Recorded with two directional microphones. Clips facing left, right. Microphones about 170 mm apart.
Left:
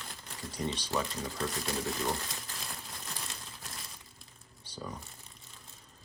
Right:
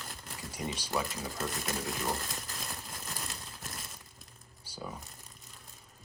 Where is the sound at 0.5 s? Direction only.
10° right (ahead or behind).